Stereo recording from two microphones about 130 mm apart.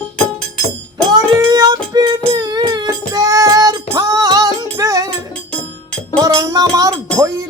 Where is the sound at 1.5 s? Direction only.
30° right (ahead or behind).